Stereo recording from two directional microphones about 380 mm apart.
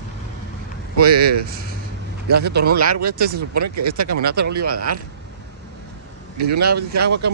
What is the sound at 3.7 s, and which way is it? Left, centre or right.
Speech, right.